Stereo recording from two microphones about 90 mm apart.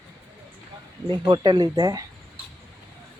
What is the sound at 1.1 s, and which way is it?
Speech, 55° right (ahead or behind).